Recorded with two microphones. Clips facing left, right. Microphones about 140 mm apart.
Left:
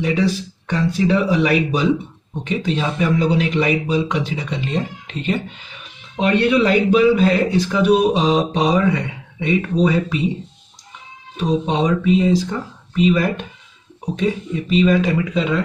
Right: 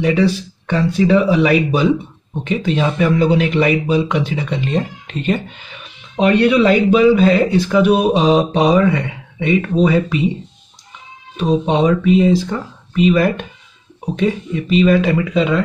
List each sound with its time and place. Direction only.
0.0 s speech: 65° right (ahead or behind)
11.3 s speech: 65° right (ahead or behind)